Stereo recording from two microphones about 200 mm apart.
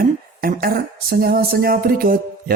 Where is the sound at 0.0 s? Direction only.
45° right (ahead or behind).